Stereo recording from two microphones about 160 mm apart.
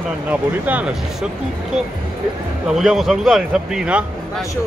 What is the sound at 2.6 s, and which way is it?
A man's voice, centre (ahead or behind).